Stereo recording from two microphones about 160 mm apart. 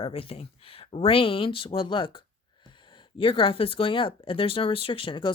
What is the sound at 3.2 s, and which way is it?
Speech, 35° left (ahead or behind).